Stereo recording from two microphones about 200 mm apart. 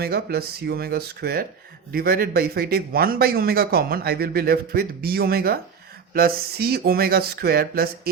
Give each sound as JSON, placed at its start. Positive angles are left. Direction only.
{"t": 0.0, "sound": "speech", "side_deg": -50}